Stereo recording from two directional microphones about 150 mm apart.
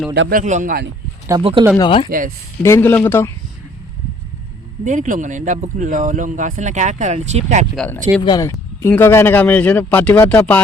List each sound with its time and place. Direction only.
0.1 s a man's voice: 70° right (ahead or behind)
1.4 s speech: 35° right (ahead or behind)
1.8 s speech: 35° left (ahead or behind)
2.0 s a man's voice: 75° right (ahead or behind)
2.6 s speech: 15° left (ahead or behind)
4.9 s speech: 60° right (ahead or behind)
8.2 s speech: 25° left (ahead or behind)